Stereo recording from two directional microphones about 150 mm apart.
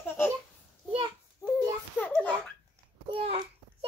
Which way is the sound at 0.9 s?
35° right (ahead or behind).